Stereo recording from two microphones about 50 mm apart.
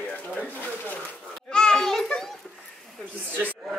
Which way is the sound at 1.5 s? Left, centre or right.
Centre.